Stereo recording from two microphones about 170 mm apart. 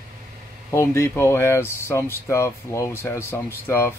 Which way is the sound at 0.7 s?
15° left (ahead or behind).